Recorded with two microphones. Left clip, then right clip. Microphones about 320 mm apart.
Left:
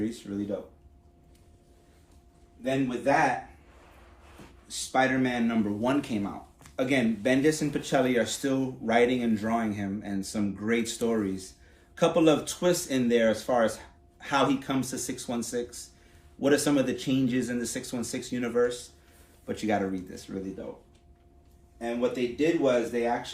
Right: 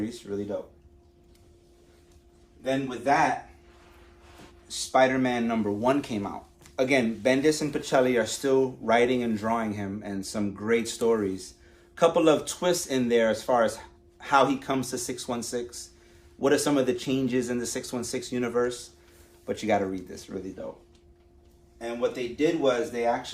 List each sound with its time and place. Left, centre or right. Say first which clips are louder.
0.0 s speech: even; centre
2.6 s speech: right 1 dB; centre
4.7 s speech: right 4 dB; centre
22.4 s speech: right 1 dB; centre